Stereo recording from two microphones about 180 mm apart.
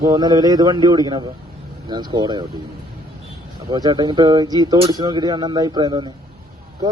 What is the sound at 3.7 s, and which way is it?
Speech, 20° right (ahead or behind).